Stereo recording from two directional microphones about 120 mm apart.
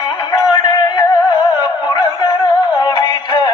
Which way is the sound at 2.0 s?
40° left (ahead or behind).